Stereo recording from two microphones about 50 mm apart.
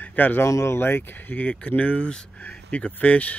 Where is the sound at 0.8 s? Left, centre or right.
Left.